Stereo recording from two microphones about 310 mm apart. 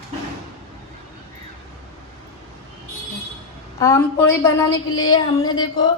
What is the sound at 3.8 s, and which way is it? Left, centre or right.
A woman's voice, centre.